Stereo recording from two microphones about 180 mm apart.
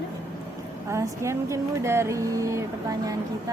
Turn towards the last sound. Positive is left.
turn(degrees=-20)  # may be behind; listen again after turning